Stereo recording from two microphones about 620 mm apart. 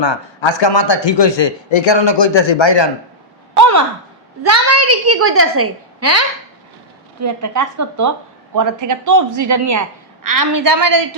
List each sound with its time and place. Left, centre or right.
0.0 s speech: left
3.6 s a sound: right
4.4 s a woman's voice: right